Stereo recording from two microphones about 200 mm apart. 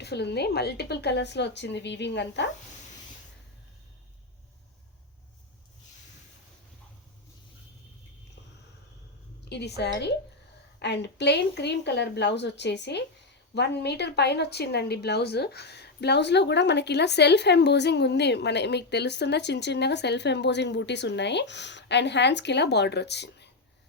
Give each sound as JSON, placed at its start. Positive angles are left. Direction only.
{"t": 0.0, "sound": "a woman's voice", "side_deg": 55}
{"t": 9.4, "sound": "a woman's voice", "side_deg": 55}